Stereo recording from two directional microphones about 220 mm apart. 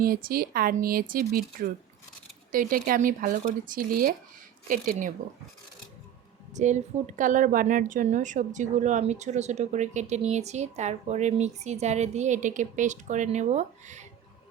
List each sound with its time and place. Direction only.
0.0 s a woman's voice: 40° right (ahead or behind)
6.5 s a woman's voice: 30° right (ahead or behind)